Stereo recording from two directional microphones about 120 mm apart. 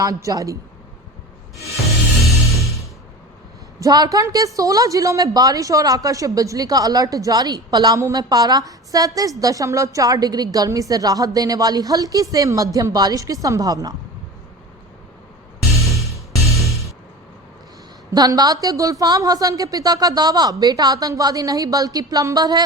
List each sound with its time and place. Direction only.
0.0 s a woman's voice: 30° right (ahead or behind)
3.8 s a woman's voice: 30° right (ahead or behind)
15.7 s music: 25° left (ahead or behind)
18.1 s a woman's voice: 35° right (ahead or behind)